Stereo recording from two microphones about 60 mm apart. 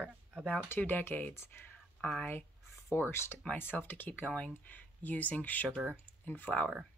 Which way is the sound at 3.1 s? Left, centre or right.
Left.